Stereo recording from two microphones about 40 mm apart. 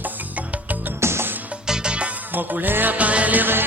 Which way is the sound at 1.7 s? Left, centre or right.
Right.